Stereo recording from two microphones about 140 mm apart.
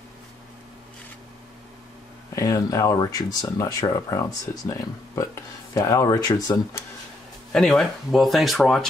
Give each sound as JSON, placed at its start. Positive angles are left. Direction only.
{"t": 2.3, "sound": "speech", "side_deg": 25}
{"t": 7.5, "sound": "speech", "side_deg": 5}